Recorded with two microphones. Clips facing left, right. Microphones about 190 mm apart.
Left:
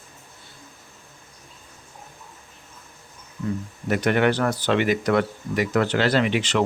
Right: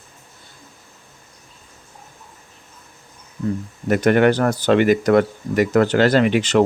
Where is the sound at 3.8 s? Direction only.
45° right (ahead or behind).